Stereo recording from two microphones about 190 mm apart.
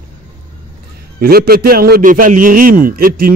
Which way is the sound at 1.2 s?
55° right (ahead or behind).